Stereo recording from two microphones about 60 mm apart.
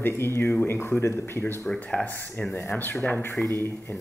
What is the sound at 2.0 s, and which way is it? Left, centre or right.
Speech, left.